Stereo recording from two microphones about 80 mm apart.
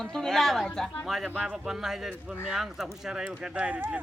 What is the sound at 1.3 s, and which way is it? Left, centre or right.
Speech, centre.